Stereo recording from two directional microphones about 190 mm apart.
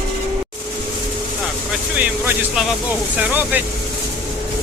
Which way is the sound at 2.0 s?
10° right (ahead or behind).